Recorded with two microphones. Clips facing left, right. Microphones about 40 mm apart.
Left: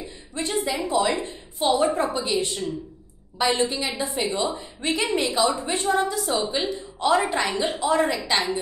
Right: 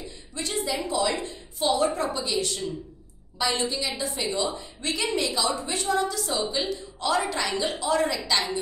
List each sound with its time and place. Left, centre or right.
0.0 s a woman's voice: left